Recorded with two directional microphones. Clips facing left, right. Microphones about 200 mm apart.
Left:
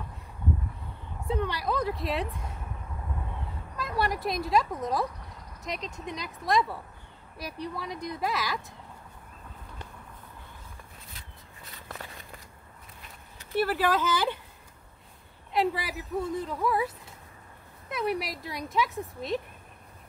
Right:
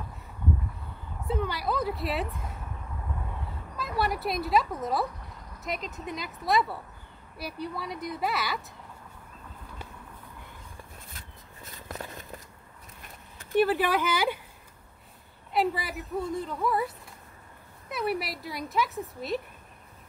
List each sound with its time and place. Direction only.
1.2 s a woman's voice: centre (ahead or behind)
3.7 s a woman's voice: centre (ahead or behind)
11.1 s a sound: 45° right (ahead or behind)
13.6 s speech: 20° right (ahead or behind)
15.5 s a woman's voice: centre (ahead or behind)